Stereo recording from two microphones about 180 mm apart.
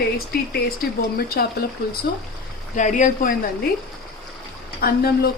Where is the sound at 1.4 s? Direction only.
65° left (ahead or behind).